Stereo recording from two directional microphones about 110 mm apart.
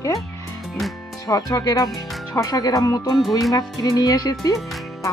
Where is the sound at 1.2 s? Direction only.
30° left (ahead or behind).